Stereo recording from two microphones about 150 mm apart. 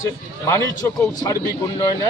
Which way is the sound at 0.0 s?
20° left (ahead or behind).